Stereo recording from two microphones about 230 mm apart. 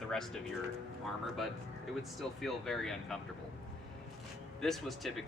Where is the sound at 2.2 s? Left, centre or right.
Centre.